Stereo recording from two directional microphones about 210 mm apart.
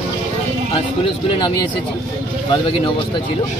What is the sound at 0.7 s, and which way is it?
Speech, 25° left (ahead or behind).